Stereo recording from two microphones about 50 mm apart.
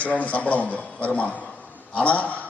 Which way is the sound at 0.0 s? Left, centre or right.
Left.